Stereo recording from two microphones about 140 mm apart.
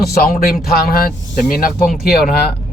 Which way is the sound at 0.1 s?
90° left.